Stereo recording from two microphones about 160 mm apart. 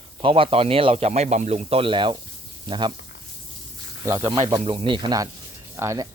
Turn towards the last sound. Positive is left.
turn(degrees=-20)  # may be behind; listen again after turning